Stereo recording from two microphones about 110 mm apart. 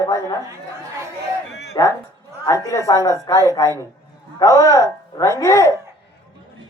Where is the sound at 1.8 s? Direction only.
40° left (ahead or behind).